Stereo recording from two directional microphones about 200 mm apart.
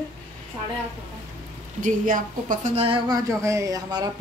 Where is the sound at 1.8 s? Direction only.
40° right (ahead or behind).